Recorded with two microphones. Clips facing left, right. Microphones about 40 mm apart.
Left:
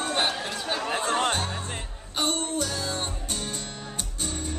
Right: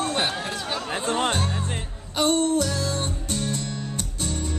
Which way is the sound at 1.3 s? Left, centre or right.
Centre.